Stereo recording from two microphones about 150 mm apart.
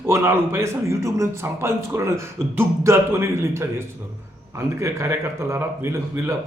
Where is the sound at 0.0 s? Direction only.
15° right (ahead or behind).